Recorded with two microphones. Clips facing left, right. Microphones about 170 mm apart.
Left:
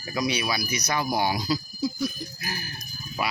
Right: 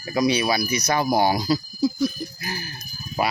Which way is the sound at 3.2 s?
35° right (ahead or behind).